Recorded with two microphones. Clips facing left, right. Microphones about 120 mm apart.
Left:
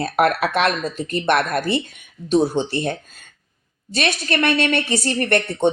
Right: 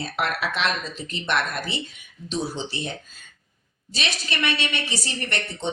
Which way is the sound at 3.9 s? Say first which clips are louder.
Left 8 dB; 55° left (ahead or behind).